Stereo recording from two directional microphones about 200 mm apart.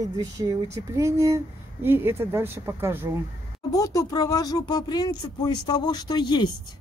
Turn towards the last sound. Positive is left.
turn(degrees=20)  # may be behind; listen again after turning